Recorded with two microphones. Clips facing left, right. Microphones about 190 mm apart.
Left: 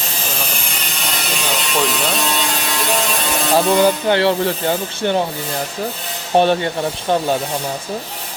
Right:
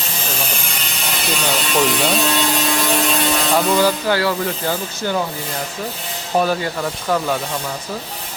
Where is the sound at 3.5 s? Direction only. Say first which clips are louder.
Left 4 dB; 25° left (ahead or behind).